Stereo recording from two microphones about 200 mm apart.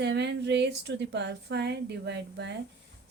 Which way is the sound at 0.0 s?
60° right (ahead or behind).